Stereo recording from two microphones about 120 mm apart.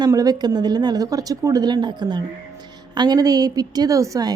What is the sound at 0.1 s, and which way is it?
A woman's voice, 30° right (ahead or behind).